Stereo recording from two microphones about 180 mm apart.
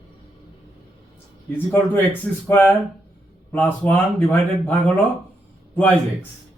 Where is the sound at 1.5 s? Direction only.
10° left (ahead or behind).